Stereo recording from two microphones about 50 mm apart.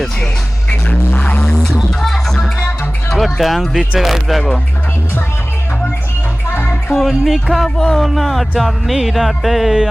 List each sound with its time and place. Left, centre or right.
0.7 s vehicle: left
1.4 s music: centre
3.8 s speech: centre
6.9 s music: centre